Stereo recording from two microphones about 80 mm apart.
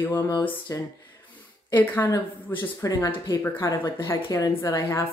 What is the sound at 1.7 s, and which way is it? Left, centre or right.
Speech, left.